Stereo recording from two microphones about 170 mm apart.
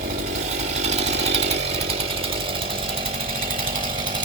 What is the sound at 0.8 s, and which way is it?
Chainsaw, 40° right (ahead or behind).